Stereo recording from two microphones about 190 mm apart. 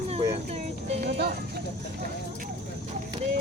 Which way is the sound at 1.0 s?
55° right (ahead or behind).